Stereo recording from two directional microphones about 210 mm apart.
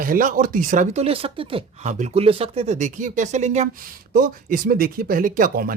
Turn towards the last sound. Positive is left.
turn(degrees=-40)  # may be behind; listen again after turning